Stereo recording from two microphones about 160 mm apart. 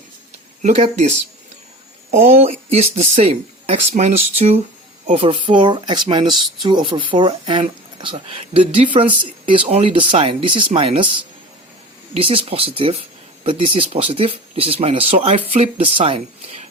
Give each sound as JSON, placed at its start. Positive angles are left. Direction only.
{"t": 0.6, "sound": "speech", "side_deg": -45}
{"t": 12.1, "sound": "speech", "side_deg": -35}